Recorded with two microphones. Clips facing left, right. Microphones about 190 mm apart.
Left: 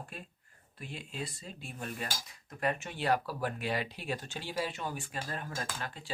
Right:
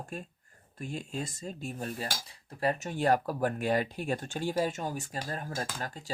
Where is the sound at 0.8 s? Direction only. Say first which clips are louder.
Right 5 dB; 45° right (ahead or behind).